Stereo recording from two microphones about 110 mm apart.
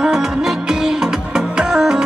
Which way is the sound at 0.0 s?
5° right (ahead or behind).